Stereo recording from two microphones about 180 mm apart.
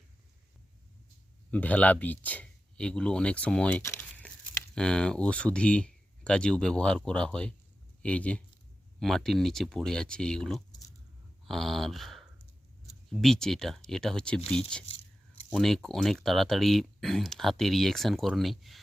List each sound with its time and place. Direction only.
1.5 s a man's voice: 10° left (ahead or behind)
14.8 s a sound: 30° left (ahead or behind)
15.4 s speech: centre (ahead or behind)